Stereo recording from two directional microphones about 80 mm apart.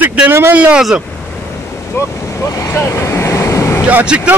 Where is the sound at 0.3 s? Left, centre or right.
Right.